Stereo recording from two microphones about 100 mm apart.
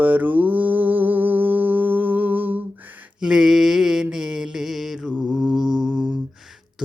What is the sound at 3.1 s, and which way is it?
Mantra, 5° right (ahead or behind).